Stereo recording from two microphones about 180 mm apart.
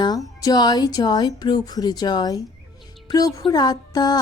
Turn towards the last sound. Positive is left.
turn(degrees=20)  # may be behind; listen again after turning